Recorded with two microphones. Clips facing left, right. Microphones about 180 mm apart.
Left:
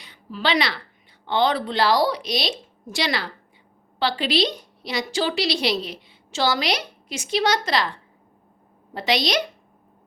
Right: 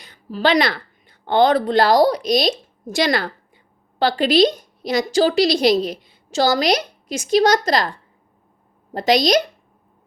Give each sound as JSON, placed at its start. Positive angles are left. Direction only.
{"t": 0.0, "sound": "a woman's voice", "side_deg": -40}